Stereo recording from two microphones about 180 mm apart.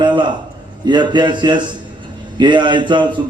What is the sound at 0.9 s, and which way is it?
A man's voice, 25° right (ahead or behind).